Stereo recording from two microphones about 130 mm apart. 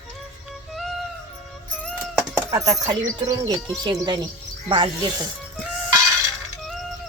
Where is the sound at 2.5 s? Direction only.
25° right (ahead or behind).